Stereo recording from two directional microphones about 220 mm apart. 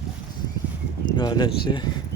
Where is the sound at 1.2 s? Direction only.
20° left (ahead or behind).